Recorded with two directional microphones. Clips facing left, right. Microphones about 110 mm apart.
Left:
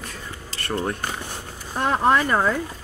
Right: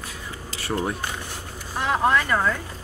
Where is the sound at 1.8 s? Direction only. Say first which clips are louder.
Left 2 dB; 35° left (ahead or behind).